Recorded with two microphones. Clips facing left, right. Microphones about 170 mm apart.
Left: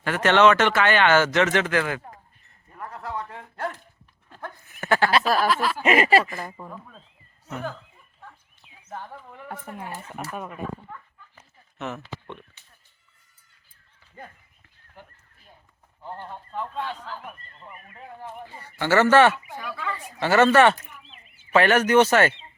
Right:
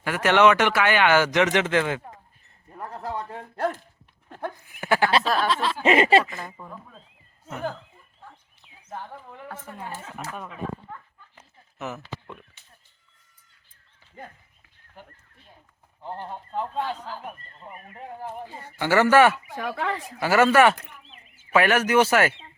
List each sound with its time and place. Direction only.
0.0 s speech: 10° right (ahead or behind)
2.7 s a man's voice: 35° right (ahead or behind)
4.6 s speech: 10° right (ahead or behind)
5.5 s speech: 25° right (ahead or behind)
8.9 s a sound: 15° right (ahead or behind)
9.5 s speech: 15° left (ahead or behind)
11.8 s speech: 5° right (ahead or behind)
16.0 s speech: 25° right (ahead or behind)
18.4 s speech: 15° right (ahead or behind)
19.5 s speech: 65° right (ahead or behind)
20.1 s speech: 10° right (ahead or behind)